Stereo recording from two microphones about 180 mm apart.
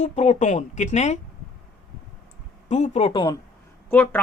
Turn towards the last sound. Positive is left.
turn(degrees=10)  # may be behind; listen again after turning